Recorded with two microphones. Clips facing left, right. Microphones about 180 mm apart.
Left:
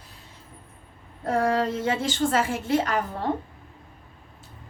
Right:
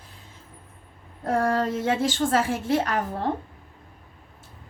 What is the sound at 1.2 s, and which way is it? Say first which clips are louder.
A woman's voice: even; 50° right (ahead or behind).